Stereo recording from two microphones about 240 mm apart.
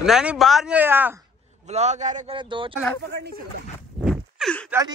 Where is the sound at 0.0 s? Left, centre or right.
Centre.